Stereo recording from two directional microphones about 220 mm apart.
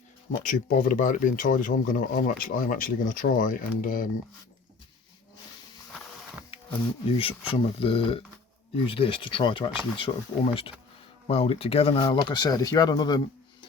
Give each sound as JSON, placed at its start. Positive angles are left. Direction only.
{"t": 0.3, "sound": "speech", "side_deg": 35}
{"t": 7.5, "sound": "speech", "side_deg": 25}